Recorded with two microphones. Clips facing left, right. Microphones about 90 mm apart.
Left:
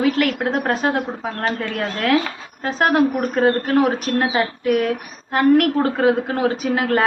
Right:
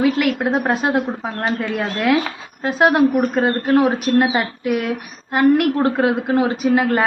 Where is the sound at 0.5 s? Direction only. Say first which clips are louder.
Right 2 dB; 15° right (ahead or behind).